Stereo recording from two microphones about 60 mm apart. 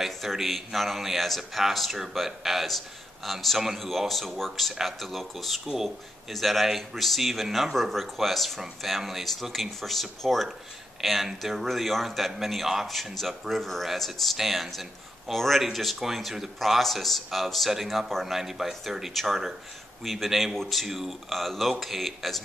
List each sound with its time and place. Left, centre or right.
0.0 s speech: centre